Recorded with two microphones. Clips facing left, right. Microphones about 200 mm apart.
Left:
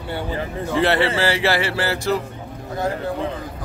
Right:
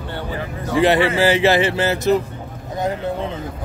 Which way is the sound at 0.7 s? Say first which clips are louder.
Right 3 dB; 15° right (ahead or behind).